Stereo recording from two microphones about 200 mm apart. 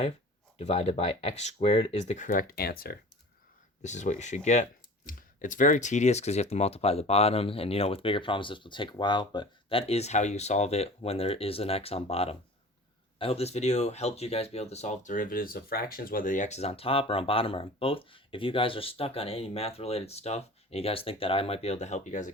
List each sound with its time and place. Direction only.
0.6 s speech: 30° left (ahead or behind); by 2.9 s 50° left (ahead or behind)
3.8 s speech: 35° left (ahead or behind)